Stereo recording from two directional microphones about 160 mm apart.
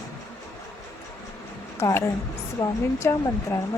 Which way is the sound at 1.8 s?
15° left (ahead or behind).